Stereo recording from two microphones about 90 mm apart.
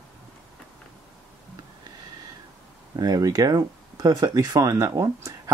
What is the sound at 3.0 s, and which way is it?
Speech, 40° right (ahead or behind).